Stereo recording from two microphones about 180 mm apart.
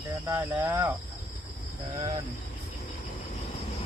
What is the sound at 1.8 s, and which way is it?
Cricket, 30° right (ahead or behind).